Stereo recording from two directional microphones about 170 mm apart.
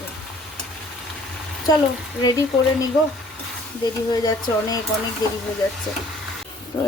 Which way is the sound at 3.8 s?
20° left (ahead or behind).